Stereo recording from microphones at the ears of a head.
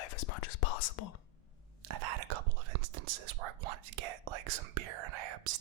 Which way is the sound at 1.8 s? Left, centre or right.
Right.